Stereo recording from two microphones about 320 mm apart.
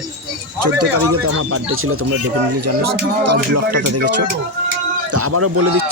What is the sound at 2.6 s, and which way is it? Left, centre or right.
Speech, right.